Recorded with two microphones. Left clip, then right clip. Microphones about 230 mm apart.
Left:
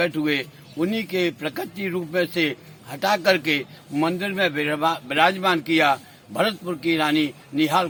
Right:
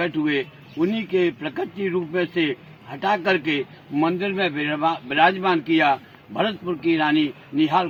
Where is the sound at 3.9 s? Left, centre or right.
Left.